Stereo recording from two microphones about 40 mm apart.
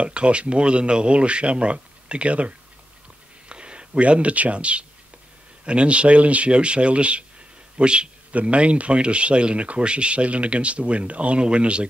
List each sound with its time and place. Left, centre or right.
0.0 s a man's voice: right